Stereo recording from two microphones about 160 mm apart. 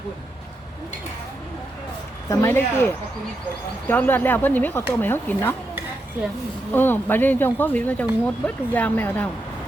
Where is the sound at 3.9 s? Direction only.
10° left (ahead or behind).